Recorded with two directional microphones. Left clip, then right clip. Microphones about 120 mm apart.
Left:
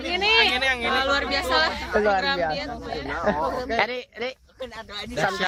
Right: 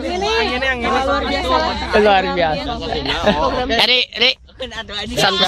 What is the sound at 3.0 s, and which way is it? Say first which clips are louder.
A man's voice: right 8 dB; 5° right (ahead or behind).